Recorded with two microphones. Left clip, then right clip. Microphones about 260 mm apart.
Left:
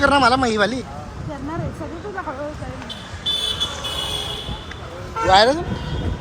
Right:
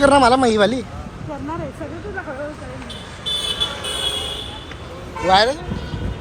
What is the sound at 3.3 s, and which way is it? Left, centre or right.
Vehicle, right.